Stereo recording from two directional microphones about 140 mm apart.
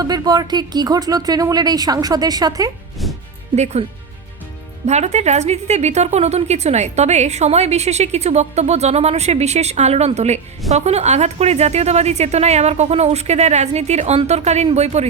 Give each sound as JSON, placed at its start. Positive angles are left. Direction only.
{"t": 0.0, "sound": "speech", "side_deg": -30}
{"t": 3.0, "sound": "music", "side_deg": 0}
{"t": 3.5, "sound": "a woman's voice", "side_deg": -50}
{"t": 4.9, "sound": "a woman's voice", "side_deg": -55}